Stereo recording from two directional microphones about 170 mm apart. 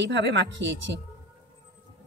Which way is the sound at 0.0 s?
90° right.